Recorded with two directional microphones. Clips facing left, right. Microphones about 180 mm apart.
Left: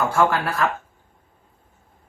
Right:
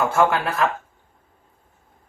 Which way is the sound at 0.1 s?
20° right (ahead or behind).